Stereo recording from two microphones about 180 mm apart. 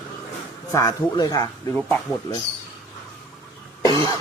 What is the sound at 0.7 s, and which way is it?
Speech, 20° left (ahead or behind).